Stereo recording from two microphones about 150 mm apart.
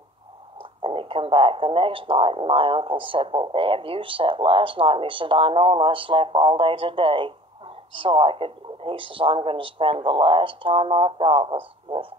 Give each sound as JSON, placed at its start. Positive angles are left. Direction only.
{"t": 0.6, "sound": "speech", "side_deg": -35}